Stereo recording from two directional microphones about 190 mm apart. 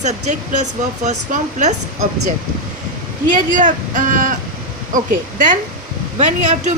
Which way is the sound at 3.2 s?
40° right (ahead or behind).